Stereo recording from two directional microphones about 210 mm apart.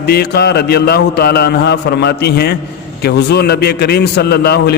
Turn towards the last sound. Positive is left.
turn(degrees=50)  # may be behind; listen again after turning